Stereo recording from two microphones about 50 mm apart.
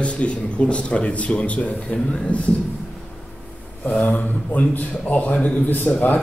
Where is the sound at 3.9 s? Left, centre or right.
Left.